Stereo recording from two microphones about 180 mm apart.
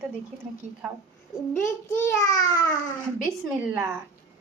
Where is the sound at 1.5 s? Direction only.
15° left (ahead or behind).